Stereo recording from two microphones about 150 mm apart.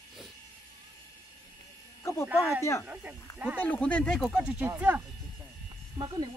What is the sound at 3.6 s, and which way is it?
Speech, 10° left (ahead or behind).